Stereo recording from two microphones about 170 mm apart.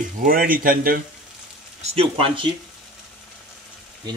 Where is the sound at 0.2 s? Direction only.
55° right (ahead or behind).